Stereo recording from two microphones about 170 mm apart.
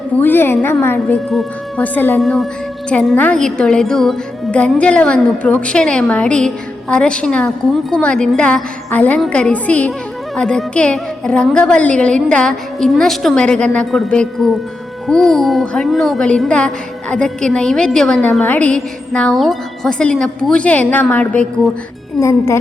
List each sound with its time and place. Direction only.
0.2 s a woman's voice: 10° left (ahead or behind)